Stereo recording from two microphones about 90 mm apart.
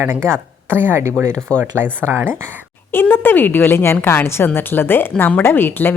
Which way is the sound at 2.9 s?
25° left (ahead or behind).